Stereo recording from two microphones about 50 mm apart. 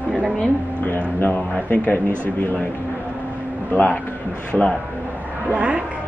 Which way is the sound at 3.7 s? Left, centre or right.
Left.